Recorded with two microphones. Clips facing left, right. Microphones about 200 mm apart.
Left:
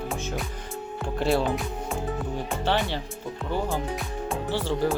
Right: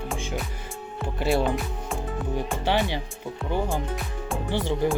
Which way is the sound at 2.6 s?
15° right (ahead or behind).